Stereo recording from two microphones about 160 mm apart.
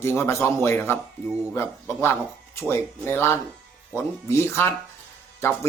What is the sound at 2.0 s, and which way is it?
A man's voice, 15° left (ahead or behind).